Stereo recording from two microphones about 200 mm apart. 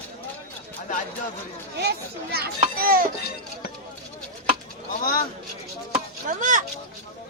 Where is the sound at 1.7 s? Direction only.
55° right (ahead or behind).